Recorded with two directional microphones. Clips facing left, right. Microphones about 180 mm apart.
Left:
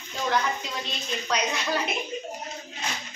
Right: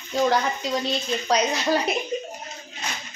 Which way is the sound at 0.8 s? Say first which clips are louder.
Right 7 dB; 35° right (ahead or behind).